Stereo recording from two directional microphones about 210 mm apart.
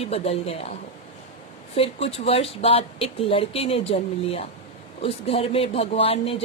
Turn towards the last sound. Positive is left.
turn(degrees=25)  # may be behind; listen again after turning